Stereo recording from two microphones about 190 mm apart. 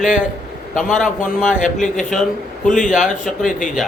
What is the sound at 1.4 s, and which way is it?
Speech, 40° left (ahead or behind).